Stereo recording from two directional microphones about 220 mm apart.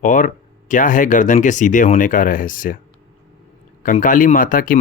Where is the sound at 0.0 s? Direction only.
35° left (ahead or behind).